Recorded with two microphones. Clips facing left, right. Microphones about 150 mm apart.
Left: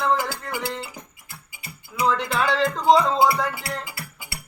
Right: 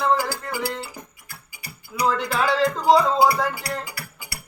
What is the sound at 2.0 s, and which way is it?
Music, centre (ahead or behind).